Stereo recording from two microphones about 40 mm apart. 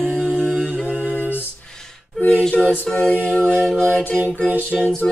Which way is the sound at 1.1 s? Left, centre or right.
Left.